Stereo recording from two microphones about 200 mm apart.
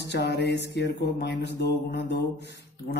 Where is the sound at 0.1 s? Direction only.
60° left (ahead or behind).